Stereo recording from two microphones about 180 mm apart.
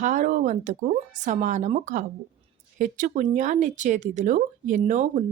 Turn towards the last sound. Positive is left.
turn(degrees=-45)  # may be behind; listen again after turning